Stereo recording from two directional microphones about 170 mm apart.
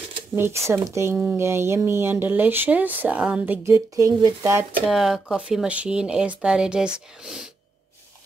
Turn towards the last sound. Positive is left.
turn(degrees=-5)  # may be behind; listen again after turning